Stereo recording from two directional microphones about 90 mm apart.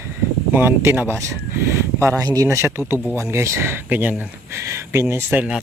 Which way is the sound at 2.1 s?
40° right (ahead or behind).